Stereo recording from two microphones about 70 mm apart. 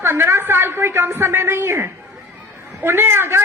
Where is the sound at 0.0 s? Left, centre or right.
Right.